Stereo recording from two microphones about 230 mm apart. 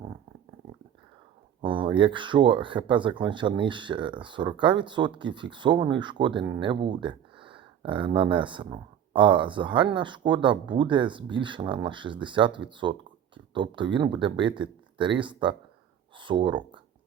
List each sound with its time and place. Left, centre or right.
1.6 s speech: right